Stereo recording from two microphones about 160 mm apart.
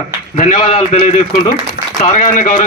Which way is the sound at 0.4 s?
50° left (ahead or behind).